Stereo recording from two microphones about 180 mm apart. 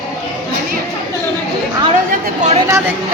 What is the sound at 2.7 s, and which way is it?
Speech, 15° right (ahead or behind).